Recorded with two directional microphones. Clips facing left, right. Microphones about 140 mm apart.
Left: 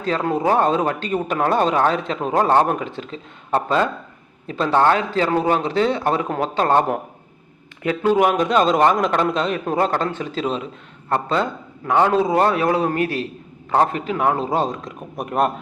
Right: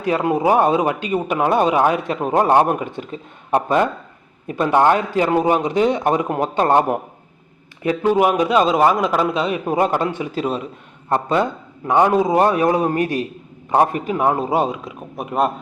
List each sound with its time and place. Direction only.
0.0 s a man's voice: 15° right (ahead or behind)
8.2 s a man's voice: 10° right (ahead or behind)